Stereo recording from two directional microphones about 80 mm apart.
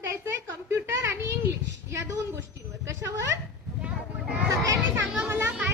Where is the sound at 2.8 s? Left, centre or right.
Right.